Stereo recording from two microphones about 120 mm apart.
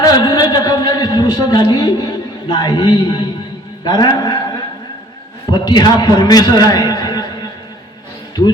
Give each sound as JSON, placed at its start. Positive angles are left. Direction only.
{"t": 0.0, "sound": "a man's voice", "side_deg": 30}